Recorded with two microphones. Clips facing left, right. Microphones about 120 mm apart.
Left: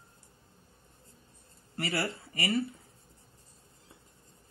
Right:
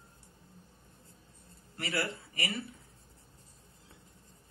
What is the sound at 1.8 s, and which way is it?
Speech, 50° left (ahead or behind).